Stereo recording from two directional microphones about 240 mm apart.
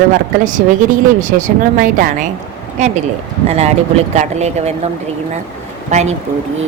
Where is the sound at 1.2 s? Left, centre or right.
Right.